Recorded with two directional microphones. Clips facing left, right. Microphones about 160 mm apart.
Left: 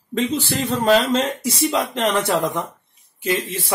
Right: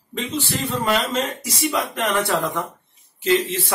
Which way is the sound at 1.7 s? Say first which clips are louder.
Even; 20° left (ahead or behind).